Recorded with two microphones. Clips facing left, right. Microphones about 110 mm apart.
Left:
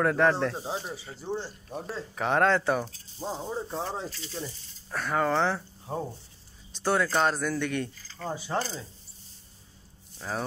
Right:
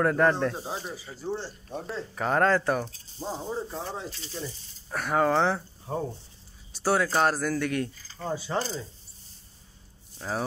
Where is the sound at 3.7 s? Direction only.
25° left (ahead or behind).